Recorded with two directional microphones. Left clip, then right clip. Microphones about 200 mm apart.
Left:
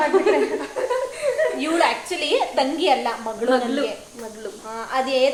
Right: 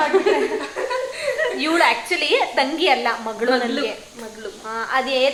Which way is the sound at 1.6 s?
5° right (ahead or behind).